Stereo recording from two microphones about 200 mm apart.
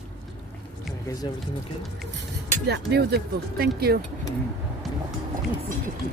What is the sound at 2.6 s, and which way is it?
Speech, 55° right (ahead or behind).